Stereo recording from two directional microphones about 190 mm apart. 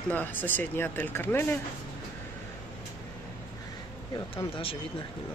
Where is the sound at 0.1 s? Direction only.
10° left (ahead or behind).